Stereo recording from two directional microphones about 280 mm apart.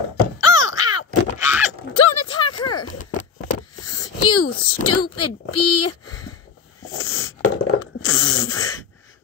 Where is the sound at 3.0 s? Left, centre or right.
Left.